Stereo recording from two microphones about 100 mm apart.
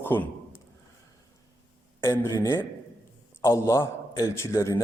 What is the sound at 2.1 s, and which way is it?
Speech, 25° left (ahead or behind).